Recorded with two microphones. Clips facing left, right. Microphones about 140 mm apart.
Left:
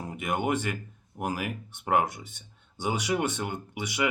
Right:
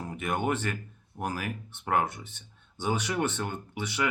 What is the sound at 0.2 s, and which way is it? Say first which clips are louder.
Speech: left 1 dB; 15° left (ahead or behind).